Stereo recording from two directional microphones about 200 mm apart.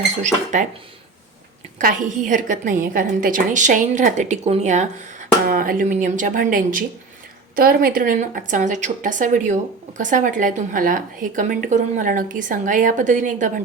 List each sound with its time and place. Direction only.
0.5 s a woman's voice: 40° right (ahead or behind)
1.8 s a woman's voice: 40° right (ahead or behind)